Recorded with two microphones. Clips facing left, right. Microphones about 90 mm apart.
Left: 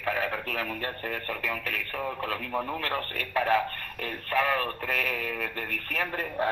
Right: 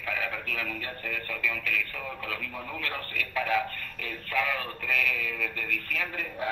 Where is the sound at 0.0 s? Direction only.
45° left (ahead or behind).